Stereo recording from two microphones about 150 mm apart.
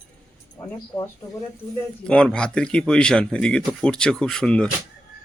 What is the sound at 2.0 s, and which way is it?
Speech, 5° left (ahead or behind).